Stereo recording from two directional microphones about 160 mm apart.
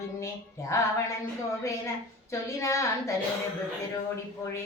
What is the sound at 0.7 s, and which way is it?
Music, 20° left (ahead or behind).